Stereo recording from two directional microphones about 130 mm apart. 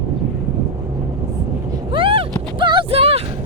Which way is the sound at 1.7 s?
40° right (ahead or behind).